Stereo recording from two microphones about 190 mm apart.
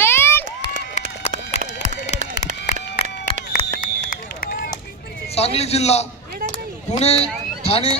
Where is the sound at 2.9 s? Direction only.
30° left (ahead or behind).